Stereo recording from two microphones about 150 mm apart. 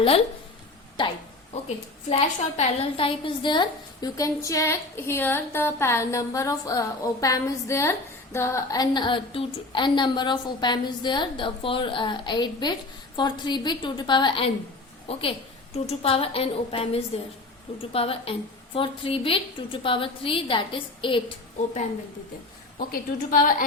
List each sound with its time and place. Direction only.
2.0 s a woman's voice: 45° left (ahead or behind)
22.8 s a woman's voice: 70° left (ahead or behind)